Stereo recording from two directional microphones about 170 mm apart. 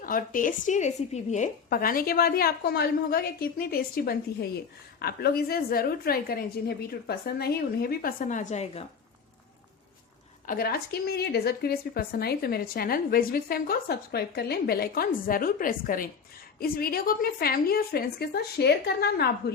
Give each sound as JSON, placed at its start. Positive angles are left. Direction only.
{"t": 0.0, "sound": "a woman's voice", "side_deg": 55}
{"t": 10.4, "sound": "a woman's voice", "side_deg": 60}